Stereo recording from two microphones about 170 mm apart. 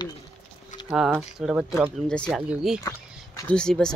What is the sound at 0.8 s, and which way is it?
Speech, 5° right (ahead or behind).